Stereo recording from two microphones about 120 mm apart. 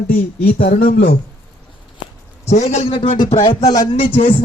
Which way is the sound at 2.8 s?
45° left (ahead or behind).